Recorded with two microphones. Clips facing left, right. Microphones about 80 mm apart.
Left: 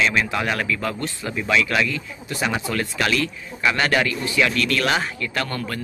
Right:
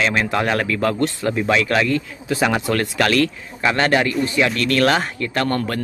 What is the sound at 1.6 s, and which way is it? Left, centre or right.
Speech, right.